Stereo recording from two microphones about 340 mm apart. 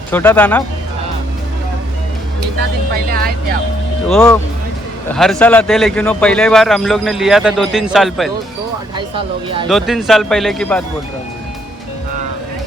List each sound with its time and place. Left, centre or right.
0.1 s speech: centre
4.1 s speech: centre
9.1 s speech: centre
9.6 s speech: centre